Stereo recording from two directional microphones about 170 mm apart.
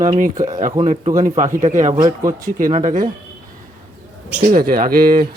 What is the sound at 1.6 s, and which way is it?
Speech, 45° right (ahead or behind).